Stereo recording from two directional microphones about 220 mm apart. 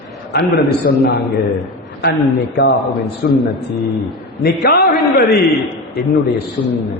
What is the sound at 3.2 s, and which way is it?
Speech, 45° left (ahead or behind).